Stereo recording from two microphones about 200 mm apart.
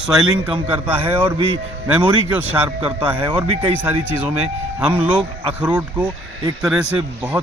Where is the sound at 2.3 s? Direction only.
10° right (ahead or behind).